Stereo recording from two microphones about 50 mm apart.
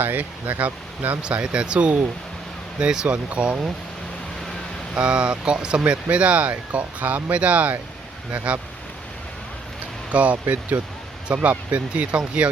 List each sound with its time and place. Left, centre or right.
0.0 s speech: right
1.2 s speech: right
4.9 s speech: centre
10.1 s speech: right